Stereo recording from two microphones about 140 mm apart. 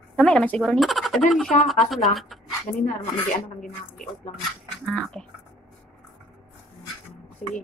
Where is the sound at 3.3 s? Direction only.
75° left (ahead or behind).